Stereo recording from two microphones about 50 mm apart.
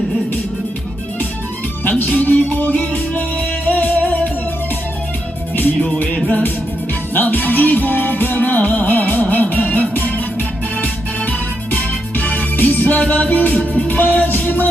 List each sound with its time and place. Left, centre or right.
1.8 s music: left
6.2 s music: left
11.3 s music: left
13.5 s music: left
13.8 s music: left